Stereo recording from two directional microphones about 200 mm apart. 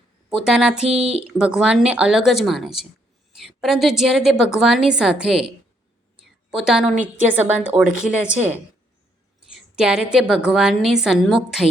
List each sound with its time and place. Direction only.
0.3 s a woman's voice: centre (ahead or behind)
0.9 s a woman's voice: 30° right (ahead or behind)
1.4 s a woman's voice: 5° right (ahead or behind)
6.5 s a woman's voice: 5° right (ahead or behind)